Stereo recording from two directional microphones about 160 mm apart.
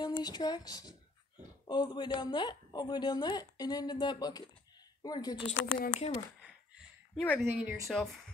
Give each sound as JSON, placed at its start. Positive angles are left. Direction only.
{"t": 0.0, "sound": "a woman's voice", "side_deg": 25}
{"t": 5.9, "sound": "speech", "side_deg": 40}
{"t": 7.2, "sound": "a woman's voice", "side_deg": 10}